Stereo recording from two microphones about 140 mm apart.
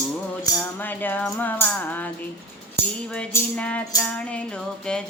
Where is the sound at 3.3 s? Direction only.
20° left (ahead or behind).